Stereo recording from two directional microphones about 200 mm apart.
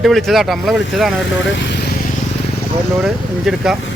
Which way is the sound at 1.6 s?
55° left (ahead or behind).